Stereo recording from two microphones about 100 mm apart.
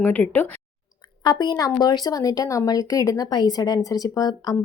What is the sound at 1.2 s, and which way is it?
A woman's voice, 45° left (ahead or behind).